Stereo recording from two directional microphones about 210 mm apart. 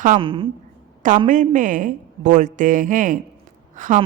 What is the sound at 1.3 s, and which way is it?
Speech, 40° right (ahead or behind).